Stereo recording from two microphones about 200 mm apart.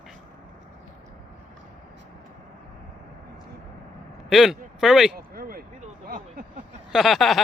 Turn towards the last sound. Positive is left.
turn(degrees=0)  # may be behind; listen again after turning